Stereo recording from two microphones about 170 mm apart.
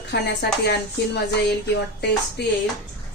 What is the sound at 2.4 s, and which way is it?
Speech, 80° left.